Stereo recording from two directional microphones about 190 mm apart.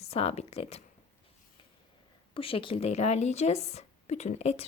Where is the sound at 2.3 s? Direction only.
30° left (ahead or behind).